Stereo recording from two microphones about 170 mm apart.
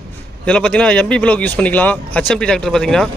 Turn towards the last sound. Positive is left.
turn(degrees=5)  # may be behind; listen again after turning